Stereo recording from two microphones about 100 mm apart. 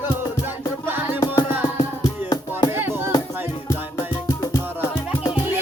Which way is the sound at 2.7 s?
25° right (ahead or behind).